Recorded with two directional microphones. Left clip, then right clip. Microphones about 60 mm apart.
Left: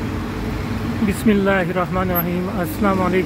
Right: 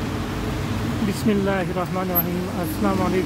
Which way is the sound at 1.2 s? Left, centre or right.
Left.